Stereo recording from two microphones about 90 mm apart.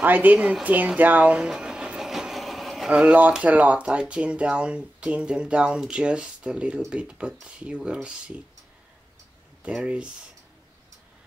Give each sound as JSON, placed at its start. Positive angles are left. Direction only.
{"t": 0.0, "sound": "a sound", "side_deg": -20}
{"t": 2.9, "sound": "speech", "side_deg": -15}
{"t": 9.6, "sound": "speech", "side_deg": -10}